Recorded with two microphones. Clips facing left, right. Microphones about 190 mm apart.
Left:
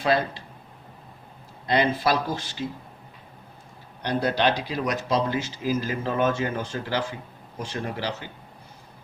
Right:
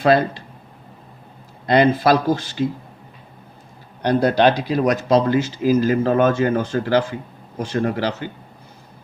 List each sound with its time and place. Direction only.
1.6 s speech: 55° right (ahead or behind)
4.0 s speech: 50° right (ahead or behind)